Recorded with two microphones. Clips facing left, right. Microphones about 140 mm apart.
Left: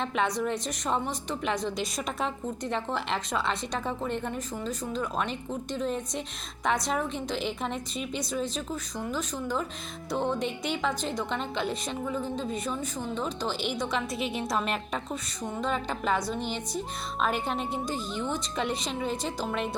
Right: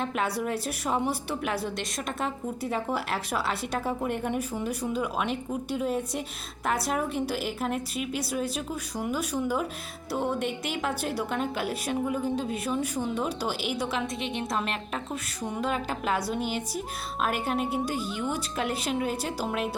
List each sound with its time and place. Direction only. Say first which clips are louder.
0.0 s a woman's voice: left 1 dB; 5° right (ahead or behind)